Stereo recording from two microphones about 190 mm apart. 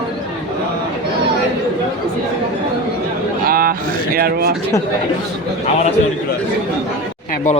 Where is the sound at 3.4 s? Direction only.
50° right (ahead or behind).